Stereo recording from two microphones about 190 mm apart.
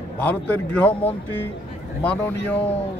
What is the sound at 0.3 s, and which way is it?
Speech, 10° left (ahead or behind).